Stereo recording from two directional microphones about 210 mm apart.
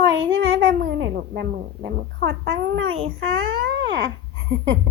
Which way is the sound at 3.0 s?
75° right (ahead or behind).